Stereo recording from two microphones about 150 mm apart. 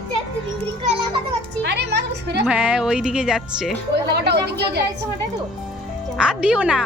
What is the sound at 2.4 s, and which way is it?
Speech, 10° right (ahead or behind).